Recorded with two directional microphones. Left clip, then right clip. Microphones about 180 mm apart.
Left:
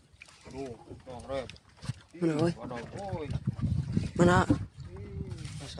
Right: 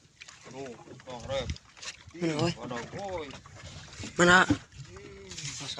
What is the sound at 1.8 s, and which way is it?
Speech, 40° left (ahead or behind).